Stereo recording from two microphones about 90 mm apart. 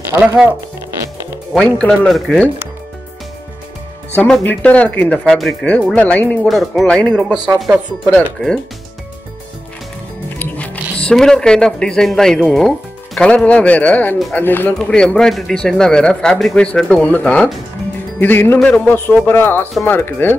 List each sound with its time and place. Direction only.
1.5 s speech: 5° left (ahead or behind)
4.4 s speech: 20° left (ahead or behind)
5.2 s speech: 10° left (ahead or behind)
6.4 s speech: centre (ahead or behind)
7.0 s speech: 10° left (ahead or behind)
7.2 s speech: 5° right (ahead or behind)
8.1 s speech: 10° left (ahead or behind)
10.4 s music: 20° left (ahead or behind)
11.1 s speech: 5° left (ahead or behind); by 14.7 s 20° left (ahead or behind)
14.8 s speech: 10° left (ahead or behind)